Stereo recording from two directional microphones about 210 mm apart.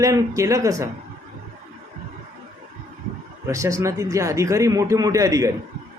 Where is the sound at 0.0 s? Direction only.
15° right (ahead or behind).